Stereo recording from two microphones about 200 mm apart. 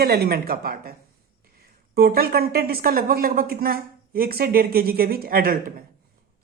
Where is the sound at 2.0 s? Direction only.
50° right (ahead or behind).